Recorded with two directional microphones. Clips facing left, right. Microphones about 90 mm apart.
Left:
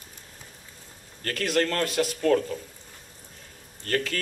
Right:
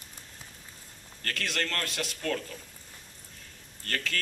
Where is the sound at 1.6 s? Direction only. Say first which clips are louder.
Left 10 dB; 20° left (ahead or behind).